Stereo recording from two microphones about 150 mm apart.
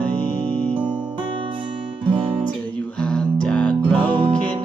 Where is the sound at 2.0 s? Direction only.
35° right (ahead or behind).